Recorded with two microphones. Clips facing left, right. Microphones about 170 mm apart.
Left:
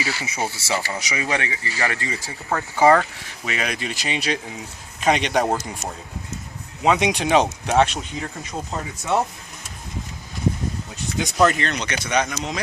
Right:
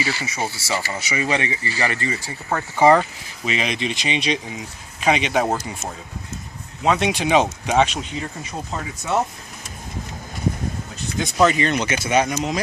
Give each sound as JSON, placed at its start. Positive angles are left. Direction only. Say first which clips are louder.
{"t": 0.0, "sound": "speech", "louder": "right 1 dB", "side_deg": 10}
{"t": 2.9, "sound": "speech", "louder": "right 1 dB", "side_deg": -15}
{"t": 4.4, "sound": "speech", "louder": "right 2 dB", "side_deg": -5}
{"t": 7.2, "sound": "speech", "louder": "even", "side_deg": -10}
{"t": 11.3, "sound": "speech", "louder": "right 2 dB", "side_deg": -5}